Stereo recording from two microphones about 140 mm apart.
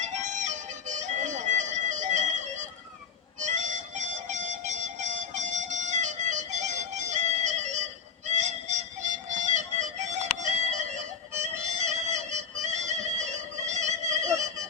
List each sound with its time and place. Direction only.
0.0 s music: 60° right (ahead or behind)
3.4 s harmonica: 60° right (ahead or behind)
8.3 s music: 55° right (ahead or behind)